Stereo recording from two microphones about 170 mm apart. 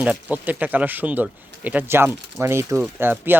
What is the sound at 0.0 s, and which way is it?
Speech, 10° right (ahead or behind).